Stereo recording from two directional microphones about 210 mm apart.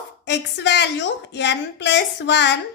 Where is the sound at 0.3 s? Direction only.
55° left (ahead or behind).